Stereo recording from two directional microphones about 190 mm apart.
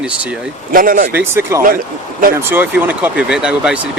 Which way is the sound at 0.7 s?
45° right (ahead or behind).